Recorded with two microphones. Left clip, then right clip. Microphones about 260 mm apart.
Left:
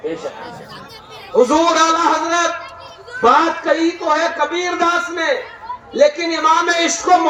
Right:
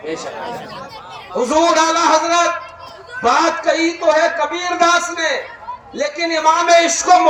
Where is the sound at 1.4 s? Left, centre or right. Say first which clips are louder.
Left 1 dB; right.